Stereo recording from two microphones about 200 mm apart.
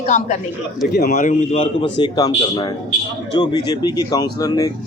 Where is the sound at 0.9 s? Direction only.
40° left (ahead or behind).